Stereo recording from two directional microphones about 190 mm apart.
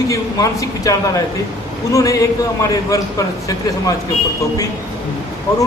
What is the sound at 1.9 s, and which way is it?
Speech, 15° left (ahead or behind).